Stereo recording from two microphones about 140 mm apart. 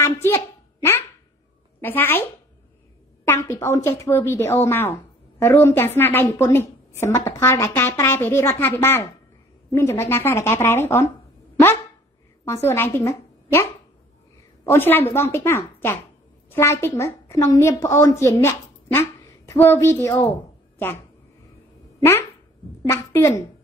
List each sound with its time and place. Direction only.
0.0 s a sound: 20° left (ahead or behind)
1.8 s speech: 15° left (ahead or behind)
3.3 s a woman's voice: 20° left (ahead or behind)
12.6 s a woman's voice: 15° left (ahead or behind)
22.8 s speech: 20° left (ahead or behind)